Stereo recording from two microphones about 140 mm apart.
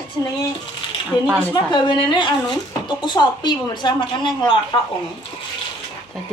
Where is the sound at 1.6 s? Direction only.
35° left (ahead or behind).